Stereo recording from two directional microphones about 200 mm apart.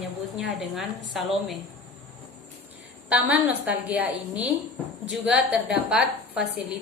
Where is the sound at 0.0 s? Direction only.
Centre (ahead or behind).